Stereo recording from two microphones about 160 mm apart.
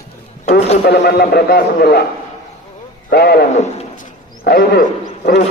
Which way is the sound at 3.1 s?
80° left.